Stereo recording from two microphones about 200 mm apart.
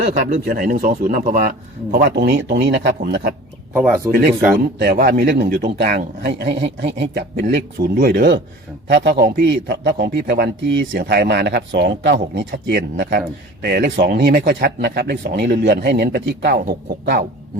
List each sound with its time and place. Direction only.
0.0 s a man's voice: 45° right (ahead or behind)
3.8 s speech: 10° right (ahead or behind)
4.8 s a man's voice: 50° right (ahead or behind)